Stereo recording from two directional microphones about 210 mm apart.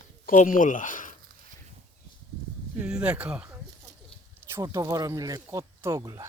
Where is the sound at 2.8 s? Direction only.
5° right (ahead or behind).